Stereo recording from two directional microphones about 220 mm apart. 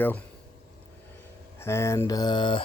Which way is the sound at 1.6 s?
10° left (ahead or behind).